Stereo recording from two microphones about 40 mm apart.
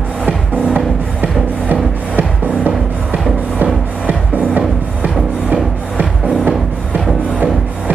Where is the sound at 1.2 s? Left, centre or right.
Right.